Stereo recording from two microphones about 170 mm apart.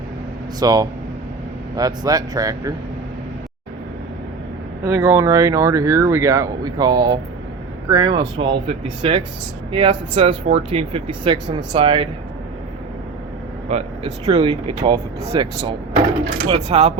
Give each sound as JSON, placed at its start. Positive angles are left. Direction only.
{"t": 0.6, "sound": "speech", "side_deg": -20}
{"t": 4.8, "sound": "speech", "side_deg": -20}
{"t": 13.7, "sound": "speech", "side_deg": -40}